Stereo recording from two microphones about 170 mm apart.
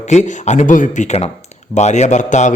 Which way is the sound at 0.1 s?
45° left (ahead or behind).